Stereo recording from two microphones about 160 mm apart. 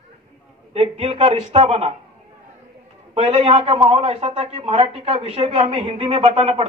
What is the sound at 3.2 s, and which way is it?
A man's voice, 40° right (ahead or behind).